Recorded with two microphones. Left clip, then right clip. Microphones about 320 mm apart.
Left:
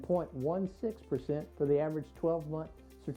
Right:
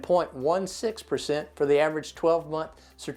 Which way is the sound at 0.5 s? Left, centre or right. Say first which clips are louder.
Right 9 dB; centre.